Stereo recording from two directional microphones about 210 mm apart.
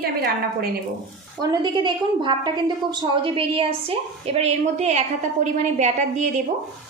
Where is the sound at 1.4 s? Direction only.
20° right (ahead or behind).